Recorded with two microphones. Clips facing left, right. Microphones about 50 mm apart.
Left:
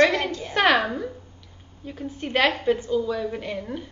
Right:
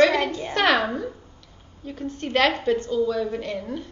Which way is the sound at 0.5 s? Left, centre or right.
Centre.